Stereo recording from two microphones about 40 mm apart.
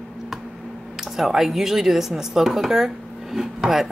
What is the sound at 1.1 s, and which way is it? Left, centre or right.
Speech, centre.